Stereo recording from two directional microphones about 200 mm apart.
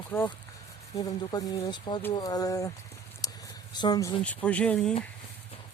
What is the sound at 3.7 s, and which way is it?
Speech, 20° left (ahead or behind).